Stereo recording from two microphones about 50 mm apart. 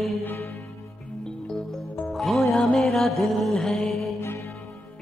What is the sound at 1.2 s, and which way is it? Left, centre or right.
Music, centre.